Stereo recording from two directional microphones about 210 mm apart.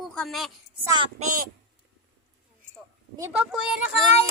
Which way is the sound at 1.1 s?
40° right (ahead or behind).